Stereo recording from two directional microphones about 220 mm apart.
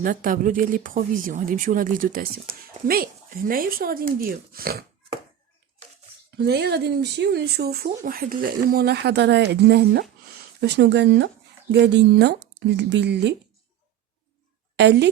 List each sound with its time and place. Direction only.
0.0 s speech: 40° right (ahead or behind)
6.3 s speech: 50° right (ahead or behind)
14.8 s speech: 50° right (ahead or behind)